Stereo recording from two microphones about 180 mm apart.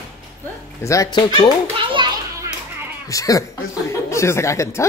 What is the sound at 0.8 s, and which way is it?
Speech, 20° left (ahead or behind).